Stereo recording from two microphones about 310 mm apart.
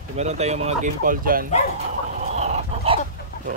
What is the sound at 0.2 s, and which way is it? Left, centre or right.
Speech, right.